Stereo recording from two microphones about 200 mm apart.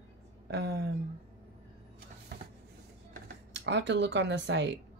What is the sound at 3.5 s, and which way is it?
Speech, 60° right (ahead or behind).